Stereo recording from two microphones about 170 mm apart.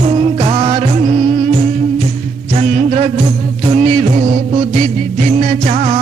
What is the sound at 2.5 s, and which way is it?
Music, 45° right (ahead or behind).